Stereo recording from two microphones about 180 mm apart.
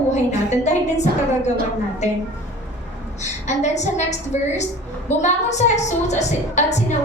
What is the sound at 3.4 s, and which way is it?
A woman's voice, 40° left (ahead or behind).